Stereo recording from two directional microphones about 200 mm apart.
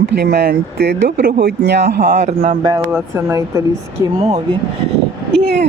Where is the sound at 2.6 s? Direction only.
20° right (ahead or behind).